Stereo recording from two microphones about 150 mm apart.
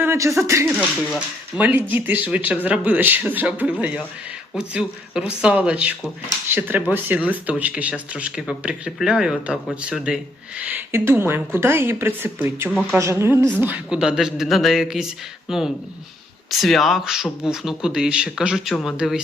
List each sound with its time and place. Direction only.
0.0 s a woman's voice: 20° right (ahead or behind)